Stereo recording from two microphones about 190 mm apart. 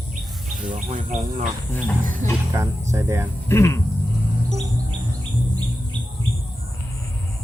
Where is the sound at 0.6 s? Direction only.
40° right (ahead or behind).